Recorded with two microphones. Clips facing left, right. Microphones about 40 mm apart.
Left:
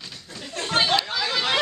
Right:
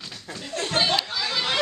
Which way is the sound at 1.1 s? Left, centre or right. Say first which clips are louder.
Left 2 dB; centre.